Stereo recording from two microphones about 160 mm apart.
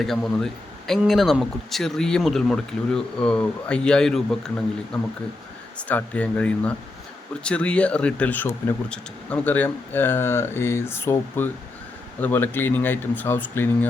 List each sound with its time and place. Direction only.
0.0 s speech: 5° left (ahead or behind)